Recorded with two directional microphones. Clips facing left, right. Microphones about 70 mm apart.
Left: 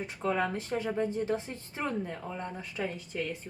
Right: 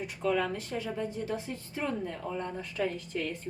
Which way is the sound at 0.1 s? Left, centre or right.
Left.